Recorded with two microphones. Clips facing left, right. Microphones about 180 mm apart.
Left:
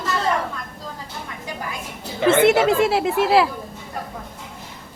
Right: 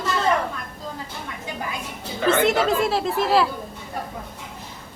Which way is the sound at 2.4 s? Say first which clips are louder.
Left 4 dB; 10° left (ahead or behind).